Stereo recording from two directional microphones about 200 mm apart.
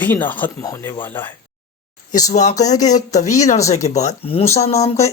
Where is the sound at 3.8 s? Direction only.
35° left (ahead or behind).